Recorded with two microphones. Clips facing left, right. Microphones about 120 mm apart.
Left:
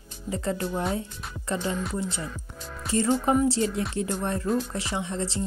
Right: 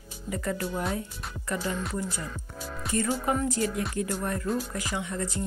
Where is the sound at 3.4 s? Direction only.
30° left (ahead or behind).